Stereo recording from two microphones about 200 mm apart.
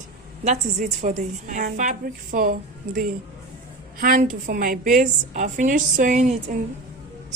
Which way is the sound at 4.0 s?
40° right (ahead or behind).